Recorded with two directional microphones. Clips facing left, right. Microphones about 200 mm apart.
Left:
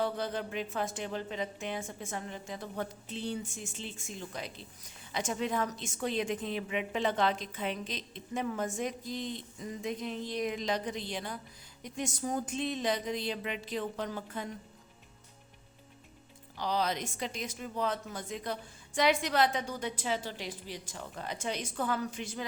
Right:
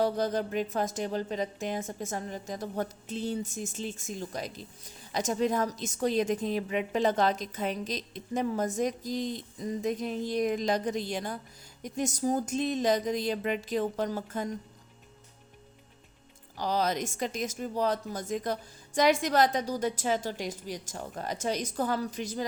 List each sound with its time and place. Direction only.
0.0 s a woman's voice: 40° right (ahead or behind)
16.6 s speech: 45° right (ahead or behind)